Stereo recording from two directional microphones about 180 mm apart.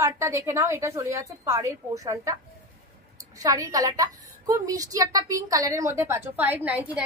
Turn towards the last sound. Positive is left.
turn(degrees=-10)  # may be behind; listen again after turning